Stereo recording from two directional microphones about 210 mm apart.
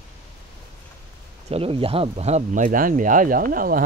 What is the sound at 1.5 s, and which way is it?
Speech, 25° right (ahead or behind).